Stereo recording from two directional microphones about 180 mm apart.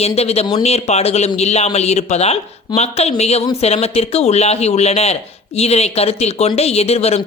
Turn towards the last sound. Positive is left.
turn(degrees=35)  # may be behind; listen again after turning